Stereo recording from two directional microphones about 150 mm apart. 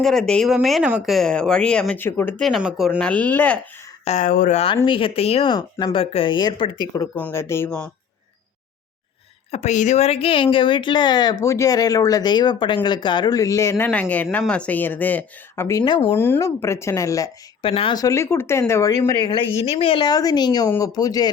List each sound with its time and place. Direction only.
0.0 s speech: centre (ahead or behind)
2.4 s speech: 5° right (ahead or behind)
4.0 s speech: 50° left (ahead or behind)
4.3 s speech: 70° left (ahead or behind)
4.5 s speech: 40° left (ahead or behind)
7.2 s speech: 15° left (ahead or behind)
9.5 s speech: 50° left (ahead or behind); by 15.8 s 15° left (ahead or behind)
15.8 s speech: 35° left (ahead or behind)
16.1 s speech: 15° left (ahead or behind)
17.6 s speech: 35° left (ahead or behind)
19.5 s speech: 40° left (ahead or behind); by 21.2 s 25° left (ahead or behind)